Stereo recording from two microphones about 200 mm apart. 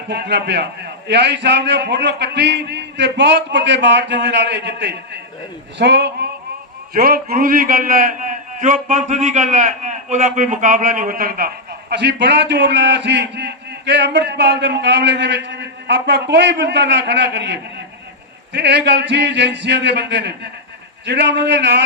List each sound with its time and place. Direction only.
0.1 s a man's voice: 60° right (ahead or behind)